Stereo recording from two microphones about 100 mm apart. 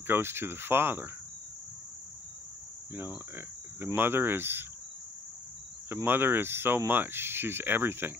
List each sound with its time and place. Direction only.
0.0 s speech: 25° right (ahead or behind)
3.3 s speech: 20° right (ahead or behind)
6.0 s speech: 20° right (ahead or behind)